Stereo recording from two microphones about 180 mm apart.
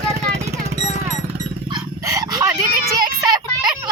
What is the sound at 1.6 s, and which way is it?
Dog, 20° right (ahead or behind).